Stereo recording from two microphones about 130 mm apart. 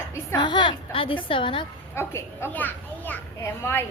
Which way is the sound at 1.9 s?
20° left (ahead or behind).